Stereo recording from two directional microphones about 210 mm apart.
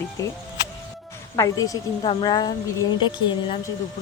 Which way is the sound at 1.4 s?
15° left (ahead or behind).